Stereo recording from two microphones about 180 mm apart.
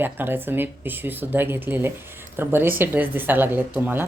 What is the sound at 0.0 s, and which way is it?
Speech, 10° right (ahead or behind).